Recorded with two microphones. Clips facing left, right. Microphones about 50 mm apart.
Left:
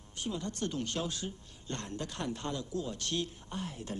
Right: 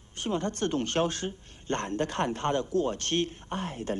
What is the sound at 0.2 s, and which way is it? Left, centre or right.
A man's voice, right.